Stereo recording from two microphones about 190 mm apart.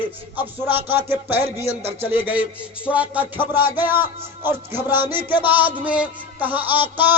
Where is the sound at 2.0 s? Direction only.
10° right (ahead or behind).